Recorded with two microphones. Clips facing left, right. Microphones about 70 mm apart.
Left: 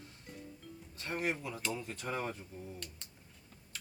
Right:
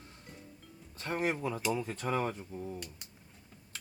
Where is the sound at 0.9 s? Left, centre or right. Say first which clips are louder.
Right 4 dB; right.